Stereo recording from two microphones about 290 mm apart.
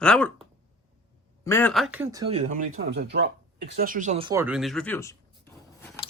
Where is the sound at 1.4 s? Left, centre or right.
Centre.